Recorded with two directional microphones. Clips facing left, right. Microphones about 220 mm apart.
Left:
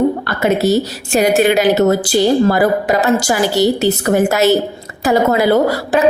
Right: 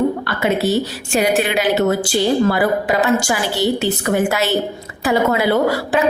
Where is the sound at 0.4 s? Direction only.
40° left (ahead or behind).